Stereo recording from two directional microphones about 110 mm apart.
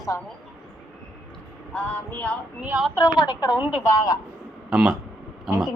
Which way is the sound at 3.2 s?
35° left (ahead or behind).